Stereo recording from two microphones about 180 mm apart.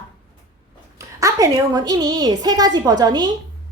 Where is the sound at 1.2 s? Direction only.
20° right (ahead or behind).